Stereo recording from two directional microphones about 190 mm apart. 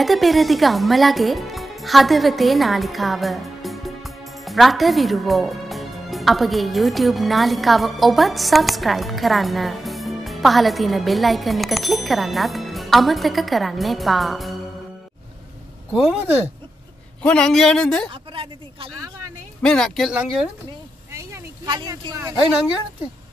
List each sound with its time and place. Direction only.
0.0 s speech: centre (ahead or behind)
15.9 s speech: 5° right (ahead or behind)
17.2 s speech: 5° left (ahead or behind)
18.3 s speech: 30° right (ahead or behind)
19.6 s speech: 5° left (ahead or behind)
21.1 s a sound: 15° right (ahead or behind)